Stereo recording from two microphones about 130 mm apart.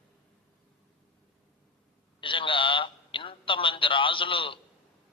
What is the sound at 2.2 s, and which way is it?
A man's voice, 40° left (ahead or behind).